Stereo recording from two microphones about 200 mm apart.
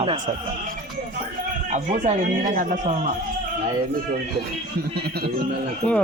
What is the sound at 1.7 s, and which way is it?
Speech, 35° right (ahead or behind).